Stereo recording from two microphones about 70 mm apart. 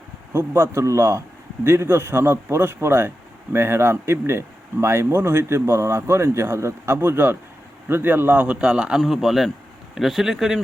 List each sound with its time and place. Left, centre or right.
0.3 s a man's voice: right
8.6 s a man's voice: centre